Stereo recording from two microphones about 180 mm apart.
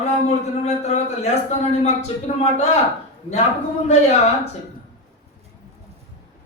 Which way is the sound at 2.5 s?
35° left (ahead or behind).